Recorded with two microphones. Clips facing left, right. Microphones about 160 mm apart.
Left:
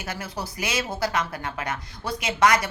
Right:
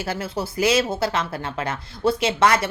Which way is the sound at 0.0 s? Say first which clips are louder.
Right 6 dB; 30° right (ahead or behind).